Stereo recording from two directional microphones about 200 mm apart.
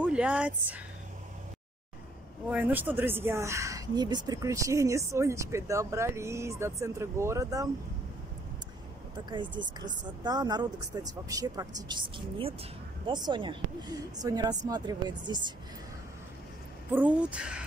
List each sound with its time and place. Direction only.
0.0 s speech: 5° right (ahead or behind)
2.5 s speech: 10° right (ahead or behind)
9.1 s a woman's voice: 25° right (ahead or behind)
16.9 s a woman's voice: 5° right (ahead or behind)